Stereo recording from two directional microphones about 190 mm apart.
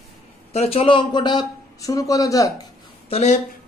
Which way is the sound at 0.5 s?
30° left (ahead or behind).